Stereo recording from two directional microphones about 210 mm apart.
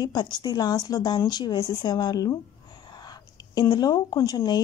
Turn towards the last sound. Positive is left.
turn(degrees=20)  # may be behind; listen again after turning